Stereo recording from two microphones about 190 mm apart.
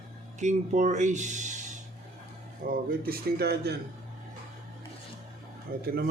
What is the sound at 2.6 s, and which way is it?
Speech, 50° right (ahead or behind).